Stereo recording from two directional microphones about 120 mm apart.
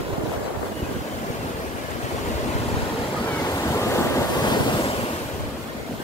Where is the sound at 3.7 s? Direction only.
25° left (ahead or behind).